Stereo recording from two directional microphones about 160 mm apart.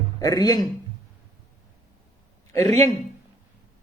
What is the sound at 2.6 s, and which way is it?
Speech, 40° right (ahead or behind).